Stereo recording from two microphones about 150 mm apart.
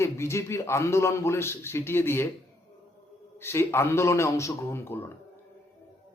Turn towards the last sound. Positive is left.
turn(degrees=15)  # may be behind; listen again after turning